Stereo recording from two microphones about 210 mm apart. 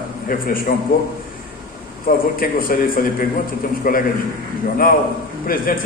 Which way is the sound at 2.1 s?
40° left (ahead or behind).